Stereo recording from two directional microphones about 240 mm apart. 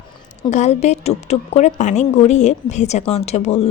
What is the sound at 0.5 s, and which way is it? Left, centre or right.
A woman's voice, left.